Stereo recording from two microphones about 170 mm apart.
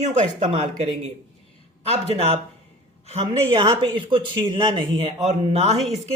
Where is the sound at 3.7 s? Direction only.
30° right (ahead or behind).